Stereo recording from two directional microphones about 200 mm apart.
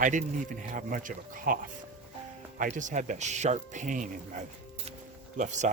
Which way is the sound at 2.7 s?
40° right (ahead or behind).